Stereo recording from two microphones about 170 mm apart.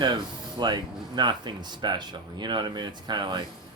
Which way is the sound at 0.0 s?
25° right (ahead or behind).